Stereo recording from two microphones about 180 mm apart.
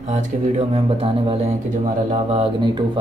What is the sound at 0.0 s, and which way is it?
Speech, 40° right (ahead or behind).